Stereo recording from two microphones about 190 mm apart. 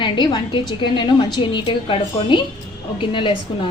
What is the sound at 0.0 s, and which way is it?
A woman's voice, 25° left (ahead or behind).